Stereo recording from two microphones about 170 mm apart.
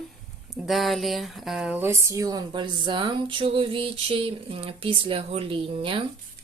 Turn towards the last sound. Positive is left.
turn(degrees=-30)  # may be behind; listen again after turning